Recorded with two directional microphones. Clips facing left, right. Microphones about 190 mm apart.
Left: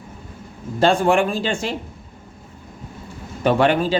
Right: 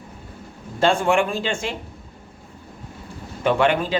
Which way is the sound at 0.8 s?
35° left (ahead or behind).